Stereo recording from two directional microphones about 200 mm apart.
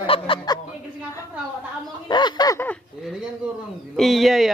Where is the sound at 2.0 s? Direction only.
20° left (ahead or behind).